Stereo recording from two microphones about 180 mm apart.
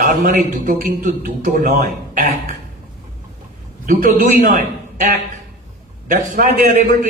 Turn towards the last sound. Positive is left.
turn(degrees=-50)  # may be behind; listen again after turning